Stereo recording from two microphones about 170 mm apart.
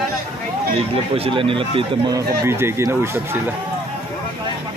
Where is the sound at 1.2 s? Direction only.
30° right (ahead or behind).